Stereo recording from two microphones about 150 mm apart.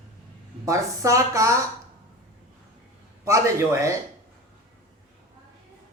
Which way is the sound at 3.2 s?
20° right (ahead or behind).